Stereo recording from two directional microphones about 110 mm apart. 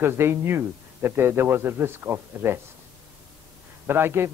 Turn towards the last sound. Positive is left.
turn(degrees=-20)  # may be behind; listen again after turning